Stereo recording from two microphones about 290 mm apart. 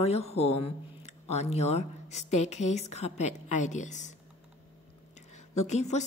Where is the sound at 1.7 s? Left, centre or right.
Left.